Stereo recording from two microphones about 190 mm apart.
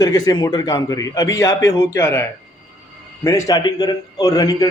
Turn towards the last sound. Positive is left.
turn(degrees=20)  # may be behind; listen again after turning